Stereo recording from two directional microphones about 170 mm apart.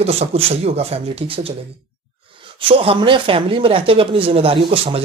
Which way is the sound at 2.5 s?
35° right (ahead or behind).